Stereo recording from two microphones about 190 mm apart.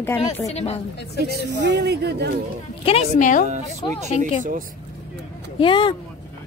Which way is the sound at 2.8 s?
30° left (ahead or behind).